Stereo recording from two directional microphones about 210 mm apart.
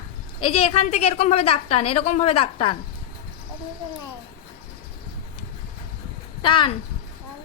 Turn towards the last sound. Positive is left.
turn(degrees=25)  # may be behind; listen again after turning